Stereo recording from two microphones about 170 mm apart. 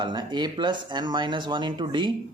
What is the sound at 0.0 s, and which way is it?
Speech, 25° right (ahead or behind).